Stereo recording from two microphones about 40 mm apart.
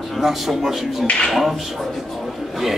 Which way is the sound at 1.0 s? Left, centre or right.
Left.